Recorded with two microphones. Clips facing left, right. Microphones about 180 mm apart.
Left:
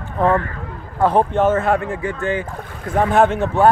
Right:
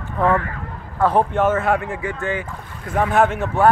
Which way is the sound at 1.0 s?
20° left (ahead or behind).